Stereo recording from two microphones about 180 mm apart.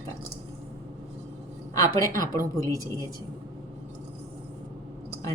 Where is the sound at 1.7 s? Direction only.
20° left (ahead or behind).